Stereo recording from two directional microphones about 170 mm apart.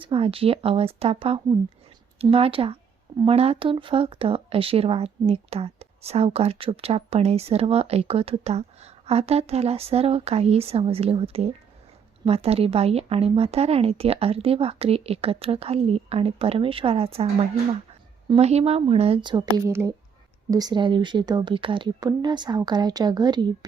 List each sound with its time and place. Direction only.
0.0 s speech: 35° right (ahead or behind)